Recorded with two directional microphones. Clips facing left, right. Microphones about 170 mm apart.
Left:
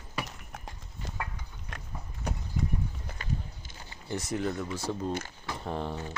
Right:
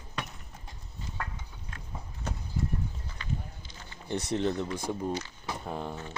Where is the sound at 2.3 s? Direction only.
10° left (ahead or behind).